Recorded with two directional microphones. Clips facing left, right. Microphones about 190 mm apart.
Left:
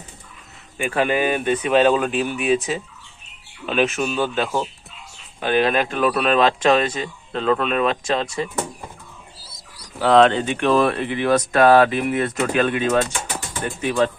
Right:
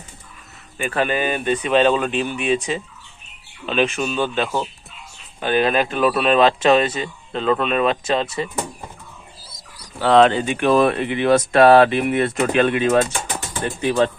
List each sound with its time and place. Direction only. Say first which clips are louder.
0.8 s speech: left 1 dB; 15° left (ahead or behind)
10.0 s speech: even; centre (ahead or behind); by 14.1 s 35° right (ahead or behind)